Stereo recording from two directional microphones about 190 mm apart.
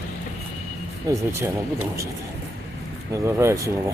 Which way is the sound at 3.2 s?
15° right (ahead or behind).